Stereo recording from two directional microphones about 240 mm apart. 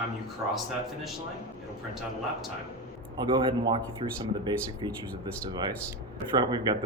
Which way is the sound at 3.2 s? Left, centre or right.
Centre.